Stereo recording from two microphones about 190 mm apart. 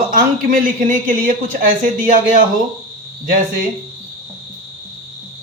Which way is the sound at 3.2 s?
45° right (ahead or behind).